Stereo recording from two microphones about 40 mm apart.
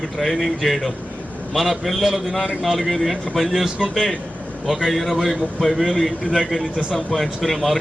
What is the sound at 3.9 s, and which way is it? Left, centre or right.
A man's voice, centre.